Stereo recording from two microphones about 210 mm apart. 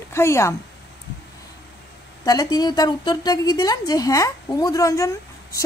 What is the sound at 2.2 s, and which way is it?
A woman's voice, 15° left (ahead or behind).